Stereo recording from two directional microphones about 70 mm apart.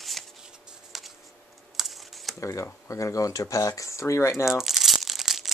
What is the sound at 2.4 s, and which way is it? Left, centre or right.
Speech, left.